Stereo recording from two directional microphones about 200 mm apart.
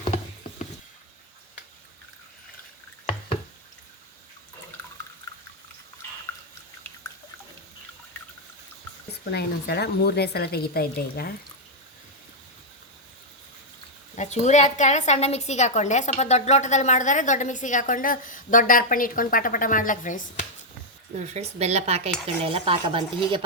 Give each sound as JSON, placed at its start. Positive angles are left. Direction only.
{"t": 9.2, "sound": "speech", "side_deg": 55}
{"t": 14.2, "sound": "a woman's voice", "side_deg": 35}
{"t": 21.2, "sound": "dishes", "side_deg": -35}
{"t": 22.5, "sound": "speech", "side_deg": -25}